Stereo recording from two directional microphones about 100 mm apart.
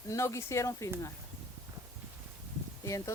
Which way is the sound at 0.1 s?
30° left (ahead or behind).